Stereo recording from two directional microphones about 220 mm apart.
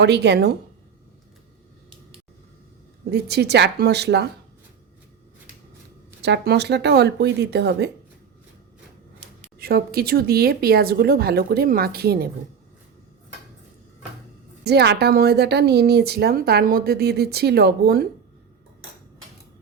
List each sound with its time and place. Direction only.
0.0 s speech: 50° right (ahead or behind)
3.1 s speech: 50° right (ahead or behind)
6.2 s speech: 50° right (ahead or behind)
9.6 s speech: 45° right (ahead or behind)
14.6 s speech: 50° right (ahead or behind)